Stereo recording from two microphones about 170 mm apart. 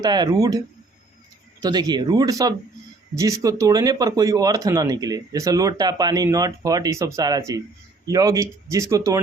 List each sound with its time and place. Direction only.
0.0 s speech: 25° right (ahead or behind)
1.6 s speech: 25° right (ahead or behind)